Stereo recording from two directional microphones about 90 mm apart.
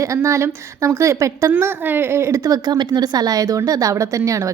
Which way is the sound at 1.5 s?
20° right (ahead or behind).